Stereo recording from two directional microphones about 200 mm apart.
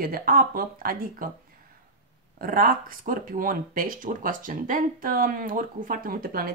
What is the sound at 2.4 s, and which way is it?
Speech, 45° right (ahead or behind).